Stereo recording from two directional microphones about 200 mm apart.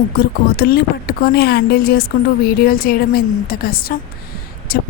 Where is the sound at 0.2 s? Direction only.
50° left (ahead or behind).